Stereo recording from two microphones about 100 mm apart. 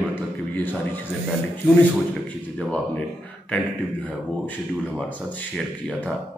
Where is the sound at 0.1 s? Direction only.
20° left (ahead or behind).